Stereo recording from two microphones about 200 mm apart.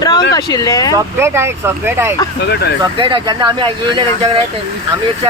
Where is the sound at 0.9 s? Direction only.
15° right (ahead or behind).